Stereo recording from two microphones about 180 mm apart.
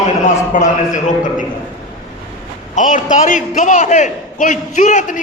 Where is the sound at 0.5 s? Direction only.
50° left (ahead or behind).